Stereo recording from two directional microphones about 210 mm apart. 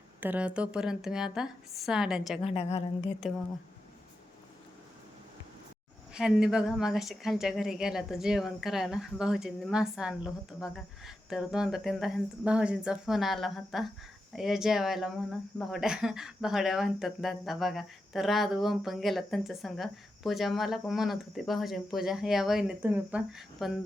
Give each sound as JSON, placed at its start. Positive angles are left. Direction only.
{"t": 0.2, "sound": "speech", "side_deg": -5}
{"t": 2.4, "sound": "a woman's voice", "side_deg": 30}
{"t": 6.1, "sound": "speech", "side_deg": -5}